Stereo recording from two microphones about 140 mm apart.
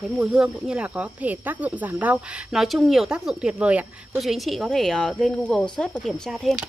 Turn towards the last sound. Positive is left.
turn(degrees=0)  # may be behind; listen again after turning